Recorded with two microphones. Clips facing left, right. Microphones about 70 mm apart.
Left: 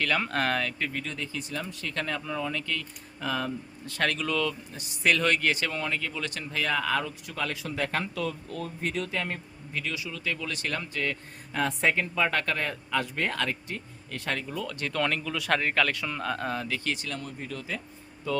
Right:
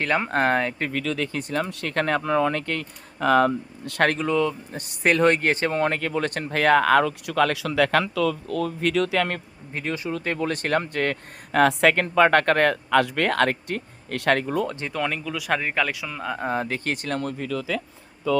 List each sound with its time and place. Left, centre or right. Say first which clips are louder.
0.0 s speech: right 5 dB; right
0.9 s speech: right 9 dB; right
1.3 s a man's voice: right 8 dB; right
4.0 s speech: right 7 dB; right
4.3 s speech: right 6 dB; right
4.7 s speech: right 4 dB; right
5.1 s speech: right 9 dB; right
9.7 s a man's voice: right 6 dB; right
14.7 s speech: right 3 dB; right
14.9 s a man's voice: even; centre
16.5 s speech: right 5 dB; right
17.7 s speech: right 7 dB; right